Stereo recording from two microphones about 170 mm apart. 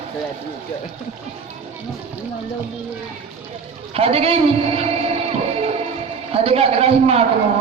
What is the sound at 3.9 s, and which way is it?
A man's voice, 35° right (ahead or behind).